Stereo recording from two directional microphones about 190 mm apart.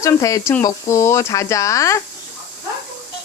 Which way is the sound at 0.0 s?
15° left (ahead or behind).